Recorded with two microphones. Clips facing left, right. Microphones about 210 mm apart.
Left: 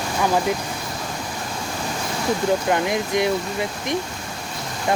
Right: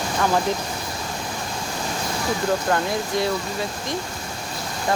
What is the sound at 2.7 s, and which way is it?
Speech, 20° left (ahead or behind).